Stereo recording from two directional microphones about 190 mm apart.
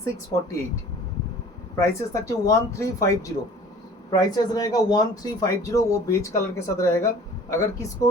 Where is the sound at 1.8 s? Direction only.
15° left (ahead or behind).